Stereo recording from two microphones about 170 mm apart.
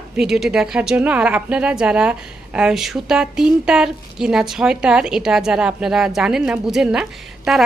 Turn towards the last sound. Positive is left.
turn(degrees=-5)  # may be behind; listen again after turning